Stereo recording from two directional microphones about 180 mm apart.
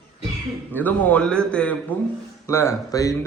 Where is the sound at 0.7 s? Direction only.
10° left (ahead or behind).